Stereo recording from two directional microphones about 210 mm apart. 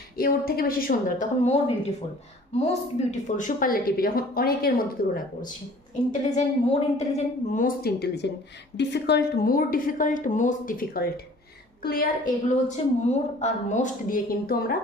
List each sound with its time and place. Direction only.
0.2 s a woman's voice: 45° left (ahead or behind)
6.3 s a woman's voice: 30° left (ahead or behind)